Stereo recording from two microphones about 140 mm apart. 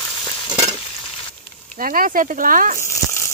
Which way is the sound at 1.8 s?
85° right.